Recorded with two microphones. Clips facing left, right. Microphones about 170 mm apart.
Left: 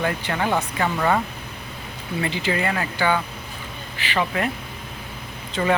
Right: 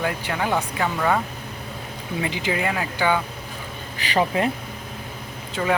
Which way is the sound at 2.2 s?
15° right (ahead or behind).